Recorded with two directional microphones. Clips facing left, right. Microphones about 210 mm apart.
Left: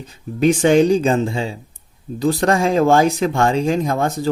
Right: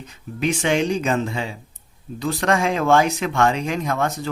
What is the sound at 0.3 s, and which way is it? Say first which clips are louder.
Speech: left 8 dB; 40° left (ahead or behind).